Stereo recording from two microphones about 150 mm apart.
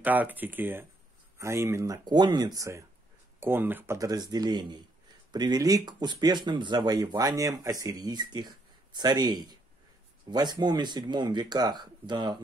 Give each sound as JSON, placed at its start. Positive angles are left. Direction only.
{"t": 0.0, "sound": "speech", "side_deg": -10}